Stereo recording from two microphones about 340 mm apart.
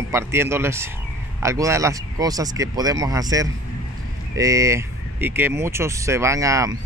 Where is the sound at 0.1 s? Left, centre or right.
Centre.